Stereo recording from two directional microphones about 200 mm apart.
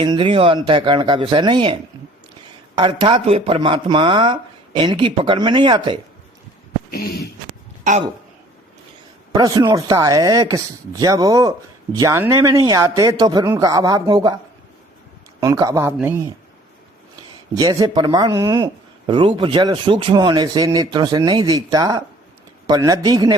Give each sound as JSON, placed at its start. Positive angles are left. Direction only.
{"t": 0.0, "sound": "speech", "side_deg": -25}
{"t": 6.9, "sound": "speech", "side_deg": 50}
{"t": 9.3, "sound": "speech", "side_deg": -20}
{"t": 15.4, "sound": "speech", "side_deg": -15}
{"t": 17.5, "sound": "speech", "side_deg": -20}